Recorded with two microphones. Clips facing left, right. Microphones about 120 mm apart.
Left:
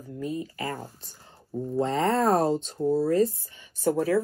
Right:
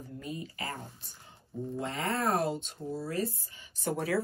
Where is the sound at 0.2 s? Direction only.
35° left (ahead or behind).